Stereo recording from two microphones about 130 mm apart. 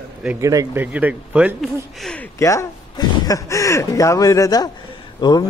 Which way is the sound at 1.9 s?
Centre (ahead or behind).